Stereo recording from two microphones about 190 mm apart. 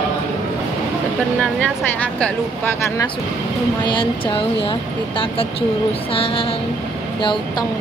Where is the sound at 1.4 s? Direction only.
5° left (ahead or behind).